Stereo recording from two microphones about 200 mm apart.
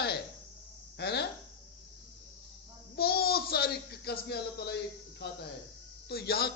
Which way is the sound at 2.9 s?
50° left (ahead or behind).